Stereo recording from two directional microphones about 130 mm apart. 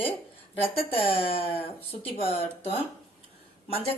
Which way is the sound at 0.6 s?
45° left (ahead or behind).